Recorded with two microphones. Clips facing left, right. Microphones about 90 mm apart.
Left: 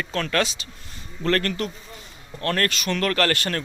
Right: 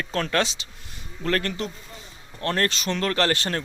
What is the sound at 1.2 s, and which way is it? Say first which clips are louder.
Speech: left 3 dB; 5° right (ahead or behind).